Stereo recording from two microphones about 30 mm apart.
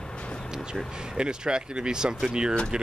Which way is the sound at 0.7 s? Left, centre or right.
Right.